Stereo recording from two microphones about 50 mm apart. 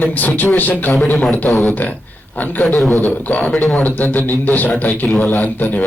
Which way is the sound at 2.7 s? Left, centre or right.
Centre.